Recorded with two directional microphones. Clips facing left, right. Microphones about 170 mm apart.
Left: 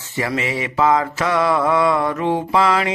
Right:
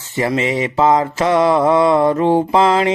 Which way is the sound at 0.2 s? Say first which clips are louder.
Right 5 dB; 25° right (ahead or behind).